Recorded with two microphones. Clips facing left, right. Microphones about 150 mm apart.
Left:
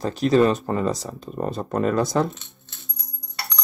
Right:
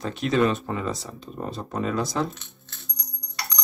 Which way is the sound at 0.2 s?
35° left (ahead or behind).